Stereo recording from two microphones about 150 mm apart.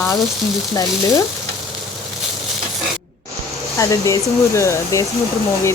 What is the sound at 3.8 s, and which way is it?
Speech, 20° left (ahead or behind).